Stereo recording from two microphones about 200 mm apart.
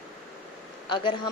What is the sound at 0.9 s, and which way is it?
Speech, 25° left (ahead or behind).